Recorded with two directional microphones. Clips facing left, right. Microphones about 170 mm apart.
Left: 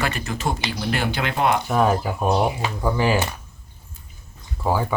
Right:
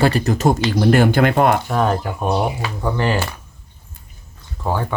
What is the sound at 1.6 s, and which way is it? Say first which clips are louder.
Speech: even; 5° left (ahead or behind).